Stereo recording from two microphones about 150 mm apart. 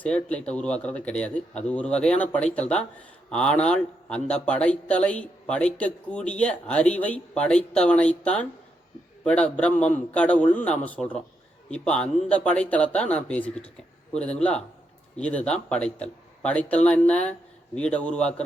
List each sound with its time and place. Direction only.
0.0 s a man's voice: 10° left (ahead or behind)